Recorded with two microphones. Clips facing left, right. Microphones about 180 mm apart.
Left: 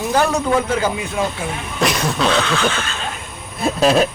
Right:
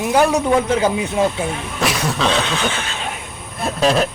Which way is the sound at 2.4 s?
20° right (ahead or behind).